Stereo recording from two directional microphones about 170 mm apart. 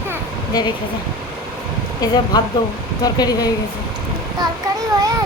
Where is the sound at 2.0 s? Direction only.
25° left (ahead or behind).